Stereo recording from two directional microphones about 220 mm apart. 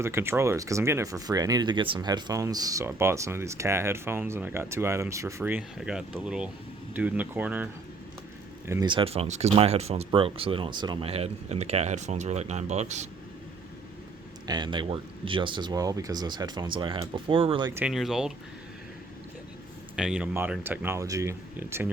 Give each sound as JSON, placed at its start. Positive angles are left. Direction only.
{"t": 0.0, "sound": "speech", "side_deg": -10}
{"t": 14.4, "sound": "speech", "side_deg": -20}
{"t": 17.7, "sound": "speech", "side_deg": -5}
{"t": 20.0, "sound": "speech", "side_deg": -5}